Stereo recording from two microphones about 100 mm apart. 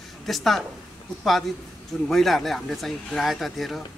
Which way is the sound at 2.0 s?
Centre (ahead or behind).